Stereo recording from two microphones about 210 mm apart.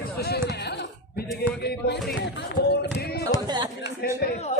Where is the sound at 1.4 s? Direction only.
50° left (ahead or behind).